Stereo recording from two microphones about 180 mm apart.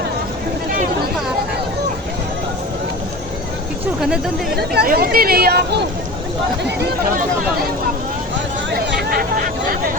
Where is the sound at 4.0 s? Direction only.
Centre (ahead or behind).